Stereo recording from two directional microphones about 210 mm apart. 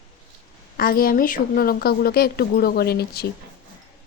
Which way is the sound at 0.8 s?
45° left (ahead or behind).